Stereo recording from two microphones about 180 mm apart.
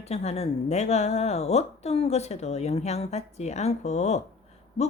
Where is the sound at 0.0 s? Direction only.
35° left (ahead or behind).